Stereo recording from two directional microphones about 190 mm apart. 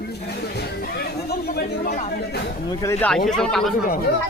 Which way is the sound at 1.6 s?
50° left (ahead or behind).